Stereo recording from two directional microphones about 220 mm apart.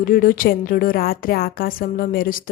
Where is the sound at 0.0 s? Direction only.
40° left (ahead or behind).